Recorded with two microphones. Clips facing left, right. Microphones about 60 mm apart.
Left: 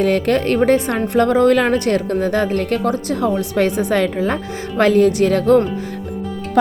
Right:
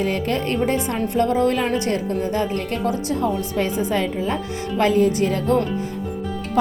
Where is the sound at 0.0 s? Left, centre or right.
Left.